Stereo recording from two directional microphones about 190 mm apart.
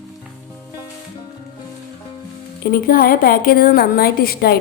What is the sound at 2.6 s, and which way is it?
A woman's voice, 50° left (ahead or behind).